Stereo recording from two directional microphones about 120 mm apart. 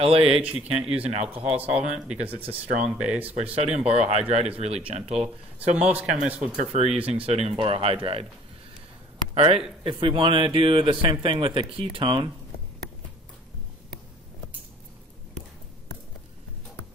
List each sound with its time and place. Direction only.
0.0 s speech: 55° right (ahead or behind)
1.5 s speech: 10° right (ahead or behind)
3.5 s speech: 60° right (ahead or behind)
5.8 s speech: 10° right (ahead or behind)
6.5 s a man's voice: 75° right (ahead or behind); by 8.3 s 50° right (ahead or behind)
9.3 s a man's voice: 55° right (ahead or behind)